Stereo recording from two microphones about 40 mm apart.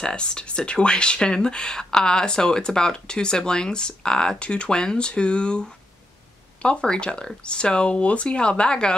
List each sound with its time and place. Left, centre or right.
0.0 s speech: left